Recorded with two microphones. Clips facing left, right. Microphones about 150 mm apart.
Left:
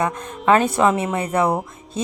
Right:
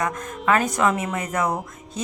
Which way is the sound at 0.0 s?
30° left (ahead or behind).